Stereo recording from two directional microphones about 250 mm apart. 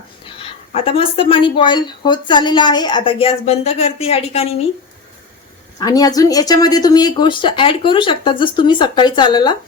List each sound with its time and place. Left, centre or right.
0.3 s speech: left
5.8 s speech: centre